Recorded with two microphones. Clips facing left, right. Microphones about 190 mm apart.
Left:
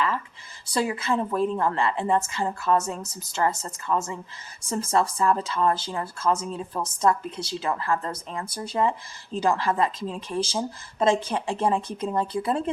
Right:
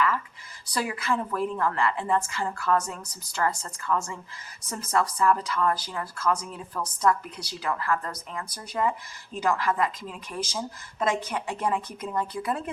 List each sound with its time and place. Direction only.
0.7 s speech: 25° left (ahead or behind)